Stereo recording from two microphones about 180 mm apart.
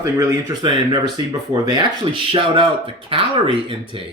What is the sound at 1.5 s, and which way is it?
Speech, 25° right (ahead or behind).